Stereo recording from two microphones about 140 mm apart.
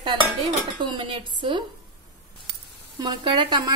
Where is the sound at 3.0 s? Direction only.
30° right (ahead or behind).